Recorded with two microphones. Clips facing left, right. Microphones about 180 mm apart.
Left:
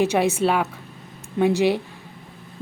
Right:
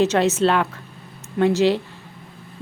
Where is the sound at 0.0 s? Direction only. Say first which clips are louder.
Right 2 dB; 10° left (ahead or behind).